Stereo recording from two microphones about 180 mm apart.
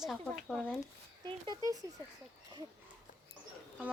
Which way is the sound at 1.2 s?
20° right (ahead or behind).